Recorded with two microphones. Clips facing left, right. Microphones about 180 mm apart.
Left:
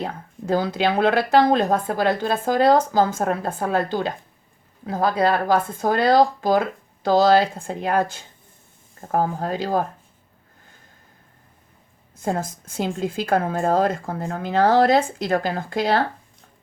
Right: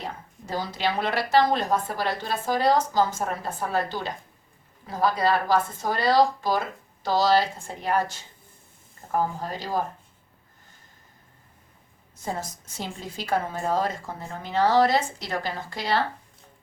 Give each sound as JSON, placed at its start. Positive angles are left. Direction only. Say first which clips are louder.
{"t": 0.0, "sound": "a woman's voice", "louder": "left 7 dB", "side_deg": 55}
{"t": 12.1, "sound": "a woman's voice", "louder": "left 7 dB", "side_deg": 55}